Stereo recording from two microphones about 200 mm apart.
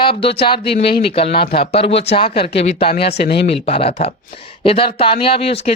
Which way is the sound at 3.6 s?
30° left (ahead or behind).